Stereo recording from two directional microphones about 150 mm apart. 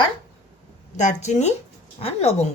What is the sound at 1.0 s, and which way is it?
Speech, 50° left (ahead or behind).